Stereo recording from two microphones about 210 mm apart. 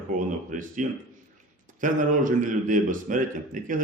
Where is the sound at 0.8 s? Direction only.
35° right (ahead or behind).